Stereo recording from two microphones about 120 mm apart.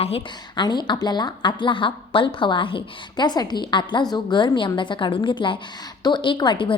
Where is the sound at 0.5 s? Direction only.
40° left (ahead or behind).